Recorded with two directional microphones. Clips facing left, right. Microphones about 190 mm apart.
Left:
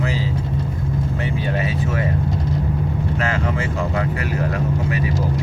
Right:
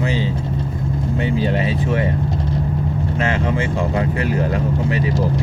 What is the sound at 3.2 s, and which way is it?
Speech, 25° right (ahead or behind).